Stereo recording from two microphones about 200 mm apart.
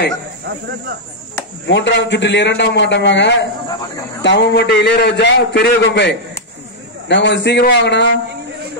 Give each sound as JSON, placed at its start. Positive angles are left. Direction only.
{"t": 0.5, "sound": "speech", "side_deg": -55}
{"t": 1.7, "sound": "a man's voice", "side_deg": 60}